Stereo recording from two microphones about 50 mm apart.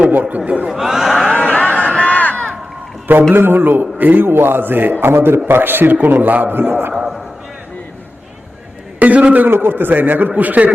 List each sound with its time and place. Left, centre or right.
0.1 s a man's voice: right
0.7 s speech: centre
1.3 s a sound: left
2.0 s crowd: left
3.3 s a man's voice: right
4.3 s a man's voice: right
6.9 s a man's voice: centre
9.0 s a man's voice: right
9.5 s a man's voice: right